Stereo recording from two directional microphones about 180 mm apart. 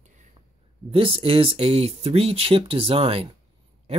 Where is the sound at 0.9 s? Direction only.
30° right (ahead or behind).